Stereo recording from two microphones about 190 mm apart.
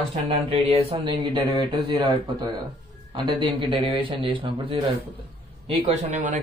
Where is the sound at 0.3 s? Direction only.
30° right (ahead or behind).